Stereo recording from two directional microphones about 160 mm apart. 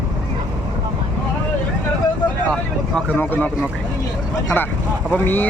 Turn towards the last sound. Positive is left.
turn(degrees=10)  # may be behind; listen again after turning